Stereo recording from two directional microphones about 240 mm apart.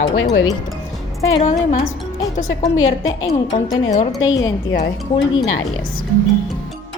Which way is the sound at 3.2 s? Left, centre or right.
Left.